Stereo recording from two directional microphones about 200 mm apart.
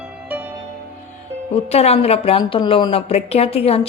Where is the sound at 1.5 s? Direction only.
30° left (ahead or behind).